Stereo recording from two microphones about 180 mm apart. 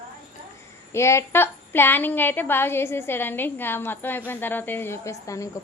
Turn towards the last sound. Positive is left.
turn(degrees=15)  # may be behind; listen again after turning